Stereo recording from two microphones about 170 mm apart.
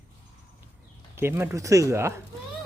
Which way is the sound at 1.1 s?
15° right (ahead or behind).